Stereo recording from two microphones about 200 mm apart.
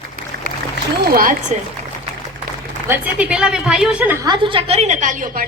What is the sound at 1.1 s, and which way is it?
Speech, 45° right (ahead or behind).